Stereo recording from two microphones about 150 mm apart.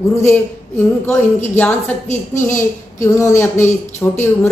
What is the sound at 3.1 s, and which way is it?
A woman's voice, 20° left (ahead or behind).